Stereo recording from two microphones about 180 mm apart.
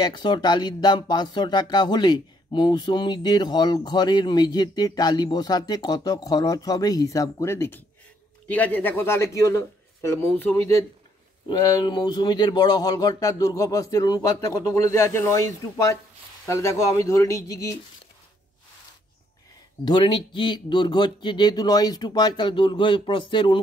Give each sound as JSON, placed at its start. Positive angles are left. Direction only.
{"t": 0.0, "sound": "speech", "side_deg": 25}
{"t": 11.4, "sound": "speech", "side_deg": 25}
{"t": 19.8, "sound": "speech", "side_deg": 25}